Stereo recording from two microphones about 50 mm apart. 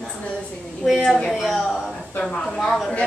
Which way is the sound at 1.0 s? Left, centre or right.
Centre.